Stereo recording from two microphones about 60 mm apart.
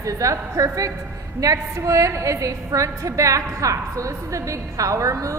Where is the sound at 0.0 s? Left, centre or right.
Right.